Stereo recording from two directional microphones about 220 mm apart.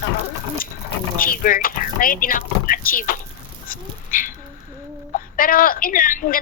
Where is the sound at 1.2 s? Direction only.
40° left (ahead or behind).